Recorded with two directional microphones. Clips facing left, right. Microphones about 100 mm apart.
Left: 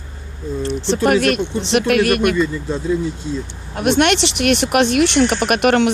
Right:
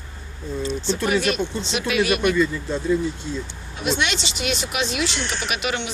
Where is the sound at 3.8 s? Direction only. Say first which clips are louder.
Left 9 dB; 65° left (ahead or behind).